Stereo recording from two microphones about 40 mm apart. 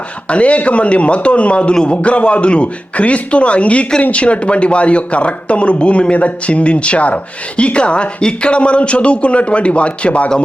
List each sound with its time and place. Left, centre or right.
0.3 s a man's voice: left
2.0 s a man's voice: left